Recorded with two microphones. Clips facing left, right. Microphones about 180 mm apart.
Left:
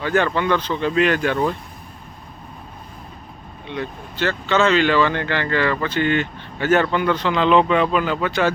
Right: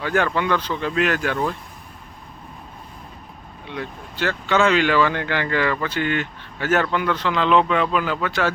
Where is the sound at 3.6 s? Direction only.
5° right (ahead or behind).